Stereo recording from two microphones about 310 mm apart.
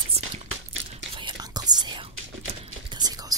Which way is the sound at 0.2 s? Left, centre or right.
Centre.